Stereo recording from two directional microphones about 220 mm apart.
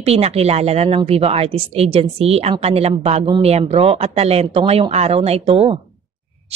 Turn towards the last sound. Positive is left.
turn(degrees=-25)  # may be behind; listen again after turning